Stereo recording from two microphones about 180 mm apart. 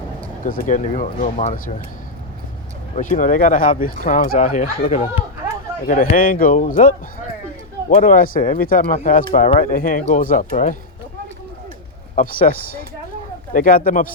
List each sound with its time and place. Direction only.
0.4 s speech: 50° left (ahead or behind)
2.9 s speech: 45° left (ahead or behind)
12.1 s speech: 50° left (ahead or behind)